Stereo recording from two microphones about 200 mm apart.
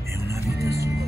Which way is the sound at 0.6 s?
15° right (ahead or behind).